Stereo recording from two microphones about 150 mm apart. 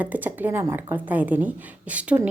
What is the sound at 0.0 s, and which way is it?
A woman's voice, 10° right (ahead or behind).